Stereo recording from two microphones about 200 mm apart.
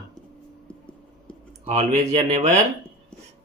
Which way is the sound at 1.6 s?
30° right (ahead or behind).